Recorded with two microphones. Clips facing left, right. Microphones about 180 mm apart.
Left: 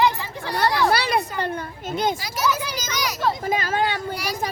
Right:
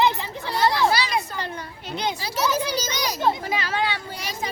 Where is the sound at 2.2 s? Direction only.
30° right (ahead or behind).